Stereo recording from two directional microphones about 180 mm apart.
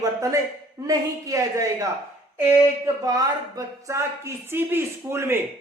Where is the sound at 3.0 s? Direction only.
20° right (ahead or behind).